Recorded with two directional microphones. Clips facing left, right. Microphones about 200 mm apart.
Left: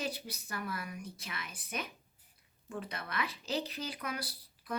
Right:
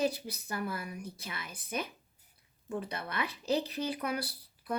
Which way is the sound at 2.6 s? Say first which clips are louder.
Right 4 dB; 30° right (ahead or behind).